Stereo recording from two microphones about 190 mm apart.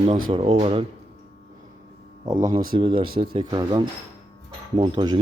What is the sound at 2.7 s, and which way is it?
Speech, 25° right (ahead or behind).